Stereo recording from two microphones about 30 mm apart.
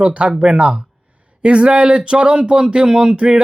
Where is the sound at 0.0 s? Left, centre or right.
Right.